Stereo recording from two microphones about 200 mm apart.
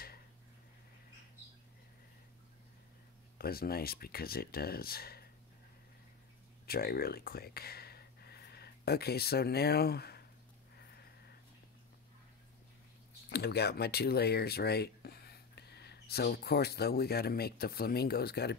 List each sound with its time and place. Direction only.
3.3 s speech: 50° left (ahead or behind)
6.6 s speech: 50° left (ahead or behind)
13.3 s speech: 55° left (ahead or behind)